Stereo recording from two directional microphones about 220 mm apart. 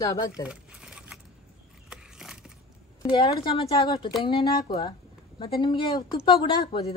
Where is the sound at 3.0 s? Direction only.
20° left (ahead or behind).